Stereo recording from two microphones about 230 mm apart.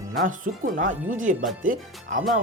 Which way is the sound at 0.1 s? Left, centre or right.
Right.